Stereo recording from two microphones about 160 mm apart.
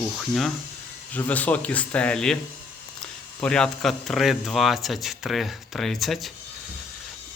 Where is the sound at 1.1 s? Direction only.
10° left (ahead or behind).